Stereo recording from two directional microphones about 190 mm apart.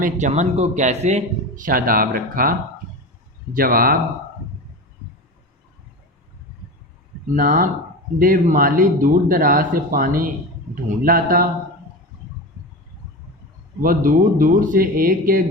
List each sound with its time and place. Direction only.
0.0 s a man's voice: 40° right (ahead or behind)
7.3 s speech: 45° right (ahead or behind)
13.8 s speech: 45° right (ahead or behind)